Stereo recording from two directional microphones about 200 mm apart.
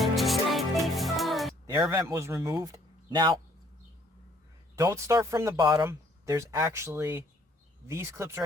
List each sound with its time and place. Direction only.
0.0 s music: centre (ahead or behind)
1.9 s speech: 15° right (ahead or behind)
4.8 s speech: 15° right (ahead or behind)